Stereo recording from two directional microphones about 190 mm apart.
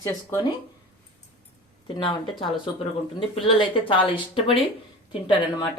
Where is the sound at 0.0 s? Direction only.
20° left (ahead or behind).